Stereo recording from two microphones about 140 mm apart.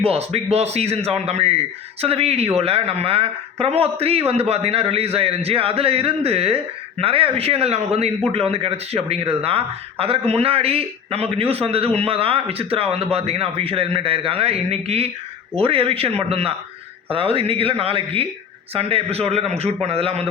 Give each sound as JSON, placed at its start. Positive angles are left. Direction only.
{"t": 0.0, "sound": "speech", "side_deg": -45}